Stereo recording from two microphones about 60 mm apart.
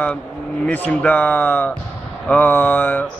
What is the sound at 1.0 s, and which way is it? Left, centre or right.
Speech, left.